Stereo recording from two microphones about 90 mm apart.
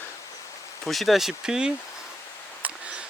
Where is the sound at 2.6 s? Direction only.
15° right (ahead or behind).